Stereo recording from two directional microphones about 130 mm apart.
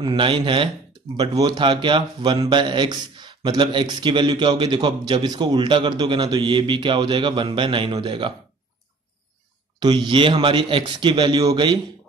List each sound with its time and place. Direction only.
0.0 s a man's voice: 40° right (ahead or behind)
9.8 s a man's voice: 35° right (ahead or behind)